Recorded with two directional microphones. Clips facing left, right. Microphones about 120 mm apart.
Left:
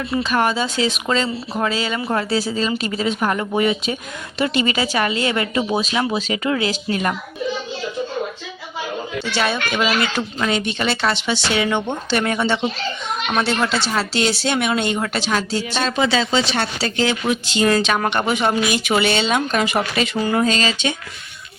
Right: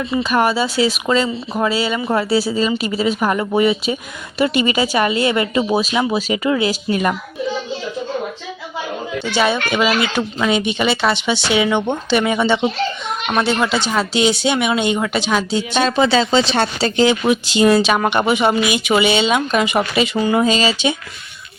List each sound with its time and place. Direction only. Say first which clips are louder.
0.2 s speech: right 3 dB; 15° right (ahead or behind)
4.4 s speech: right 3 dB; 15° right (ahead or behind)
5.7 s speech: right 3 dB; 5° right (ahead or behind)
9.4 s speech: right 4 dB; 10° right (ahead or behind)
16.0 s speech: right 3 dB; 30° right (ahead or behind); by 20.9 s 10° right (ahead or behind)